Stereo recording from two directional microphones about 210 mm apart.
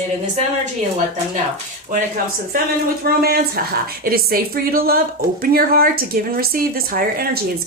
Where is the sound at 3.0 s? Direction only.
45° right (ahead or behind).